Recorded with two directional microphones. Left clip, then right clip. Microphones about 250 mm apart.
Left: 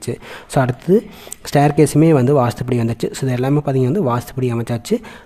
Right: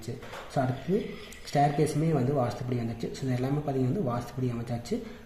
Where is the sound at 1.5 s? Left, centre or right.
Left.